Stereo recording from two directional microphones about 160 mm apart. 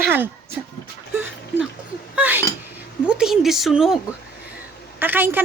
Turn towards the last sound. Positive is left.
turn(degrees=-10)  # may be behind; listen again after turning